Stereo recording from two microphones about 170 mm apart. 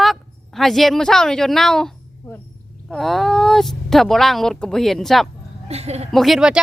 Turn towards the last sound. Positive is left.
turn(degrees=0)  # may be behind; listen again after turning